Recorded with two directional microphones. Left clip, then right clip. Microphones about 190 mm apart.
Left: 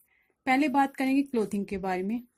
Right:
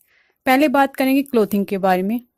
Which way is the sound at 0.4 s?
50° right (ahead or behind).